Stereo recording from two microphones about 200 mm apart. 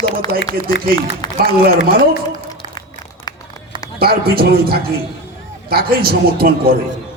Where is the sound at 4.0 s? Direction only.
50° right (ahead or behind).